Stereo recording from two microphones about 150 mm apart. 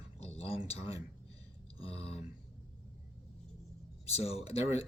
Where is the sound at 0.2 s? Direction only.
45° left (ahead or behind).